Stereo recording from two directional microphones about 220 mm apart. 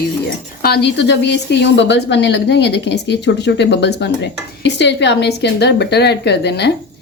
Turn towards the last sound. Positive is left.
turn(degrees=50)  # may be behind; listen again after turning